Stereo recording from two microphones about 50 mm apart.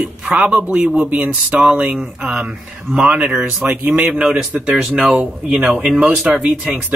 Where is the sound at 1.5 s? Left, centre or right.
Centre.